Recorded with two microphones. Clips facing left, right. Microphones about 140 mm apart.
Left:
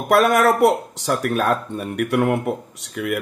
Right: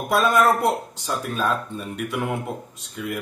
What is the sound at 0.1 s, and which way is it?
Speech, 75° left (ahead or behind).